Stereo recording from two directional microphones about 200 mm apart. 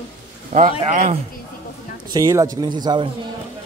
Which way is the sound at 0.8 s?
35° right (ahead or behind).